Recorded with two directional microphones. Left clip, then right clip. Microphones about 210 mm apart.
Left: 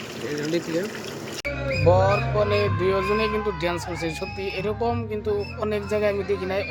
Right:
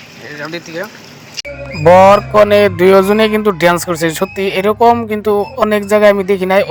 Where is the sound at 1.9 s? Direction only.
50° right (ahead or behind).